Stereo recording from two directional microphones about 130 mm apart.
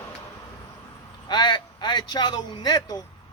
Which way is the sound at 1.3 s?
35° left (ahead or behind).